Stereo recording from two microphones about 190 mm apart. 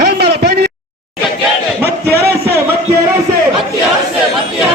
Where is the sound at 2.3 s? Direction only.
15° right (ahead or behind).